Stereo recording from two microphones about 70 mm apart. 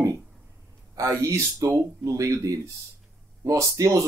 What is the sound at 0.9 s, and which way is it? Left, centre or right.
Speech, right.